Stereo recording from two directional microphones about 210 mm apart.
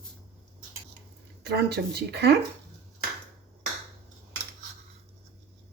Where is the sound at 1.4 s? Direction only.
50° right (ahead or behind).